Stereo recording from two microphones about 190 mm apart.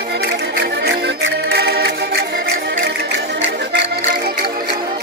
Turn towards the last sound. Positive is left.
turn(degrees=-65)  # may be behind; listen again after turning